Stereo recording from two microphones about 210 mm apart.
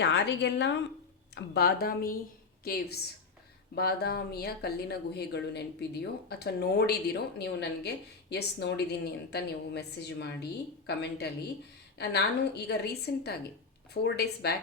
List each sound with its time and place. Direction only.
0.0 s a woman's voice: 55° left (ahead or behind)